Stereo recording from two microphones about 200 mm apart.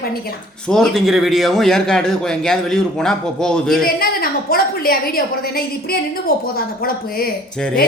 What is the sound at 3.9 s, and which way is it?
A woman's voice, 45° left (ahead or behind).